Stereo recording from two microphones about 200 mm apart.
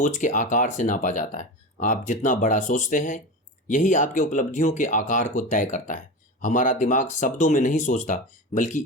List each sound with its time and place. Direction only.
0.0 s speech: 40° left (ahead or behind)